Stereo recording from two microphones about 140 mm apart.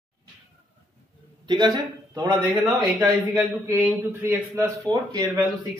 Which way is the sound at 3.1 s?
20° right (ahead or behind).